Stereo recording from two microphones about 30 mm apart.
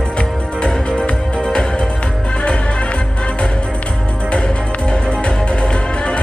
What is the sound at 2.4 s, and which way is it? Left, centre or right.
Music, left.